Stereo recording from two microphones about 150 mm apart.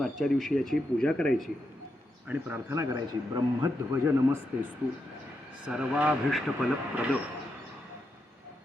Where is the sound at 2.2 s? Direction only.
10° right (ahead or behind).